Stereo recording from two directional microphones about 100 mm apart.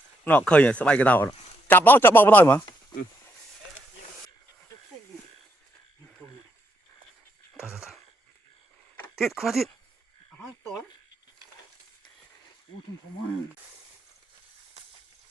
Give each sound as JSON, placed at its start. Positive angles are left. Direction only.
{"t": 0.3, "sound": "a man's voice", "side_deg": 10}
{"t": 7.5, "sound": "wail", "side_deg": -10}
{"t": 9.1, "sound": "speech", "side_deg": -5}